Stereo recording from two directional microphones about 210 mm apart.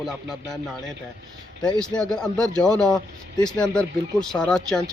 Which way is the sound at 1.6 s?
5° left (ahead or behind).